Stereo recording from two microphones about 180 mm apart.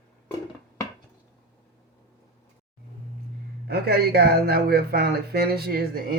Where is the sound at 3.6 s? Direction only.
60° right (ahead or behind).